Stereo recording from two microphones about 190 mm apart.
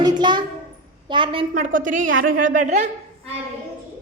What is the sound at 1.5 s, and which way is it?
Speech, 45° right (ahead or behind).